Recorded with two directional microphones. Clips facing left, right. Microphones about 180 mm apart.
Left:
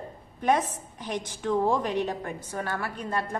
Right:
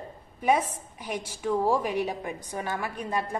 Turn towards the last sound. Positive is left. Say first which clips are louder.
# even
turn(degrees=-15)  # may be behind; listen again after turning